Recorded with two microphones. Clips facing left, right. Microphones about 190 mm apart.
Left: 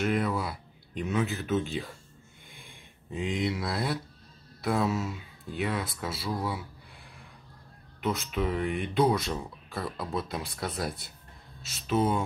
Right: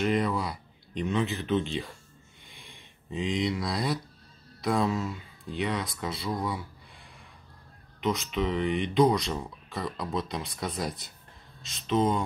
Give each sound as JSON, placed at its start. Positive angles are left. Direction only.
{"t": 0.0, "sound": "speech", "side_deg": 0}
{"t": 2.5, "sound": "a sound", "side_deg": 50}
{"t": 3.1, "sound": "speech", "side_deg": 0}
{"t": 8.0, "sound": "speech", "side_deg": 5}